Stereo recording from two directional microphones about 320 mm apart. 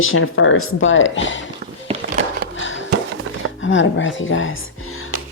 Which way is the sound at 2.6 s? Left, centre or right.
Left.